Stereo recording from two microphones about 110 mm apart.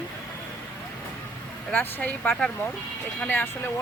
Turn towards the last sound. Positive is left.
turn(degrees=20)  # may be behind; listen again after turning